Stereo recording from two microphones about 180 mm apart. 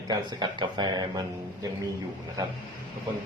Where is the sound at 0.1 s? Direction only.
25° right (ahead or behind).